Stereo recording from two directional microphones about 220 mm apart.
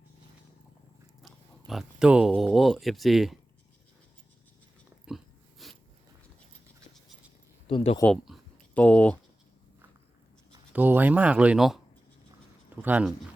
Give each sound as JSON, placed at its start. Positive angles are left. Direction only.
{"t": 1.2, "sound": "speech", "side_deg": 0}
{"t": 5.0, "sound": "dog", "side_deg": 0}
{"t": 7.7, "sound": "speech", "side_deg": 25}
{"t": 8.0, "sound": "speech", "side_deg": 0}
{"t": 10.7, "sound": "speech", "side_deg": -10}